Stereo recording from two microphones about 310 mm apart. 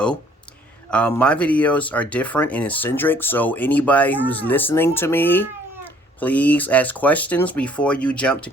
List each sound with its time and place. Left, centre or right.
0.9 s speech: centre